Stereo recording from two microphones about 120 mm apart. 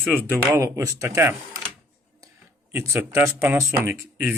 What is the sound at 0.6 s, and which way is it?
Speech, 25° right (ahead or behind).